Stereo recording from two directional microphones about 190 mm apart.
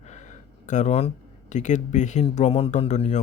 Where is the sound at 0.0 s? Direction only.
35° left (ahead or behind).